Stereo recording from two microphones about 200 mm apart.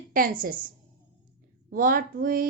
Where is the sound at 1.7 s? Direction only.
45° right (ahead or behind).